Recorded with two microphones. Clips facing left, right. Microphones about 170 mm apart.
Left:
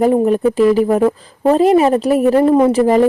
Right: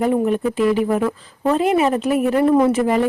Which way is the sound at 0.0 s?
40° left (ahead or behind).